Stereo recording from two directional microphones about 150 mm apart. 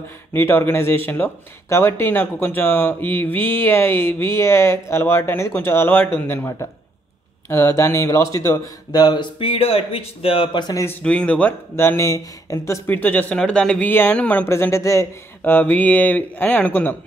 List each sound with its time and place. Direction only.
0.3 s speech: 15° left (ahead or behind); by 10.6 s 35° left (ahead or behind)
10.7 s speech: 20° left (ahead or behind)
11.0 s speech: 10° left (ahead or behind)